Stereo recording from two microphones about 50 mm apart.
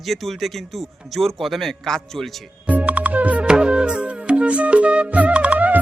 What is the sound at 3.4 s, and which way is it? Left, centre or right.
Music, centre.